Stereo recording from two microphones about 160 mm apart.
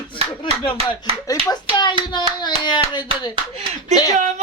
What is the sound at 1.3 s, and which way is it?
Hands, 25° left (ahead or behind).